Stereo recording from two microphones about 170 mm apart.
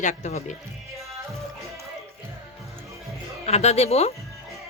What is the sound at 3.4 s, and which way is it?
Speech, 40° left (ahead or behind).